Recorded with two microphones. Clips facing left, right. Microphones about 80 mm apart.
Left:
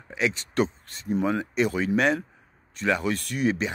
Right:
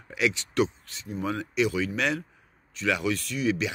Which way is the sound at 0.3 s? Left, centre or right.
Left.